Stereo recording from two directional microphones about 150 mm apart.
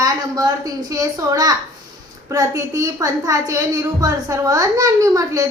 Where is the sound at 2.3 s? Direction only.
25° right (ahead or behind).